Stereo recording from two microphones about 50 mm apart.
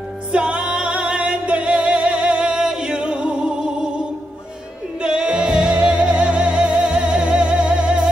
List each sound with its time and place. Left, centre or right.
0.3 s music: right
5.0 s music: centre